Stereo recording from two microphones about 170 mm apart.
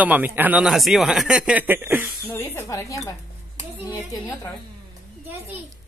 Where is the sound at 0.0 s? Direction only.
10° right (ahead or behind).